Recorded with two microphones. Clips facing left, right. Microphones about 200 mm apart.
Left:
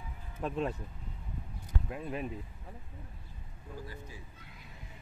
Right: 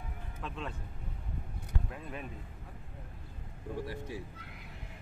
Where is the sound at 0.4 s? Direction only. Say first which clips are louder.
Left 8 dB; 45° left (ahead or behind).